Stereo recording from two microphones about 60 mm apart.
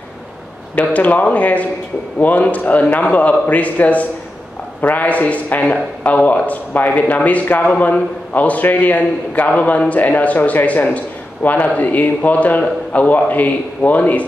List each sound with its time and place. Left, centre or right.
0.7 s a man's voice: left